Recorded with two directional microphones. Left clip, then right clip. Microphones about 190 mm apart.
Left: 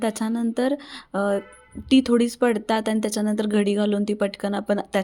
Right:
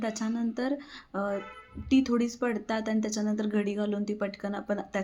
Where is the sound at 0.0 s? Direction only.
50° left (ahead or behind).